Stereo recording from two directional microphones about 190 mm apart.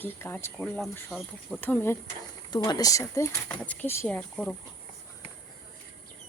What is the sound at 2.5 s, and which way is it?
Speech, 20° left (ahead or behind).